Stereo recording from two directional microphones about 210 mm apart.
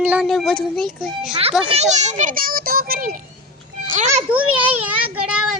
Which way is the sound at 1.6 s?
30° right (ahead or behind).